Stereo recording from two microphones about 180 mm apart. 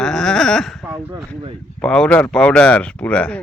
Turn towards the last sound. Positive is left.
turn(degrees=5)  # may be behind; listen again after turning